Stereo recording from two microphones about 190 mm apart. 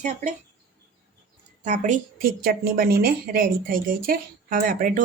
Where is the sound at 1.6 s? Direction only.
40° right (ahead or behind).